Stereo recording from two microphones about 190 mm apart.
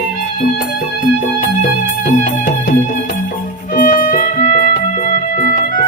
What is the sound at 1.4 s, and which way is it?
Music, 45° left (ahead or behind).